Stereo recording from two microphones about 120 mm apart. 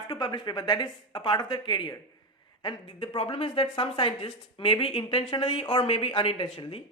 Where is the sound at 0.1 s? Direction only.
40° left (ahead or behind).